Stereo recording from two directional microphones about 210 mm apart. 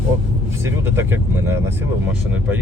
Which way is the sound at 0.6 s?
10° right (ahead or behind).